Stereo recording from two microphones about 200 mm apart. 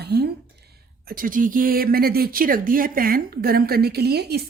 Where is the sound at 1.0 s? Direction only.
45° right (ahead or behind).